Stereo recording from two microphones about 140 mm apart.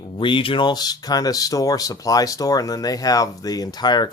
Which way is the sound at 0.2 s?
35° left (ahead or behind).